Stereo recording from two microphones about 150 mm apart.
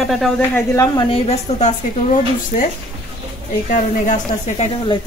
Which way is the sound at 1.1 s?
40° left (ahead or behind).